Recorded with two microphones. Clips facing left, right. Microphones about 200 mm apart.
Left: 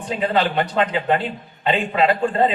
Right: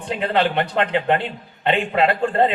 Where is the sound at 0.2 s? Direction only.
60° right (ahead or behind).